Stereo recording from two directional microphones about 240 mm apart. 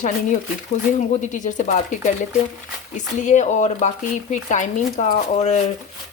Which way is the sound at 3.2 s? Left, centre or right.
Left.